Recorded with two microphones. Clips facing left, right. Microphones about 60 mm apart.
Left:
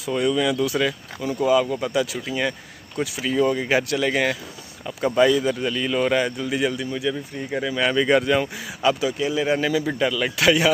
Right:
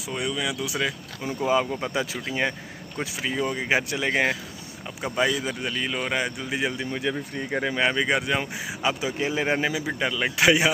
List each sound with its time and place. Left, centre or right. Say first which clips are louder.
0.0 s speech: left 7 dB; centre
1.2 s speech: left 4 dB; right
5.0 s speech: left 7 dB; centre; by 7.0 s right
7.0 s speech: left 2 dB; right
7.7 s speech: left 6 dB; right
9.2 s speech: left 1 dB; right
9.7 s speech: left 5 dB; centre